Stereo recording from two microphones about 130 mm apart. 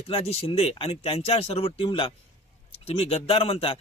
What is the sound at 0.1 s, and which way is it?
A man's voice, 50° left (ahead or behind).